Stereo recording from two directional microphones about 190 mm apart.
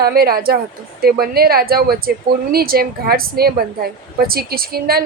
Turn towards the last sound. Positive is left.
turn(degrees=-50)  # may be behind; listen again after turning